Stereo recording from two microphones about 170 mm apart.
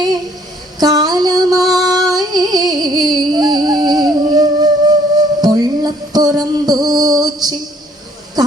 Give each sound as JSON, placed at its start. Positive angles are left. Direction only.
{"t": 0.8, "sound": "music", "side_deg": -25}
{"t": 1.6, "sound": "music", "side_deg": 0}
{"t": 1.9, "sound": "music", "side_deg": -20}